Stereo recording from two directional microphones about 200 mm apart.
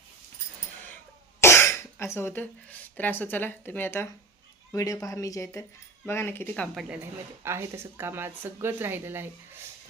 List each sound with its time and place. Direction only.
1.4 s speech: 15° left (ahead or behind)
7.4 s speech: 15° right (ahead or behind)